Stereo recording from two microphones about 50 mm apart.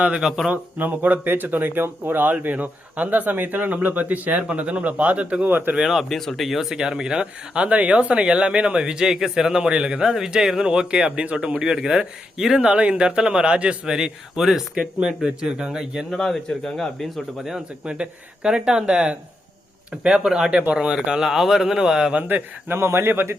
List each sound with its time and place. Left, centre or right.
0.5 s speech: right
5.5 s a man's voice: right
5.7 s speech: centre
12.6 s speech: right
16.1 s speech: centre
17.8 s speech: right
21.2 s speech: centre
22.7 s a man's voice: right